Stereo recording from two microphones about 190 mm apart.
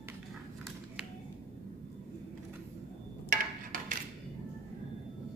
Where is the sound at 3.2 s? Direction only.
45° right (ahead or behind).